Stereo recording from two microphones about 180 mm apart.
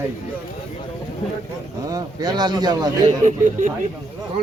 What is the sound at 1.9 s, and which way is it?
Speech, 20° right (ahead or behind).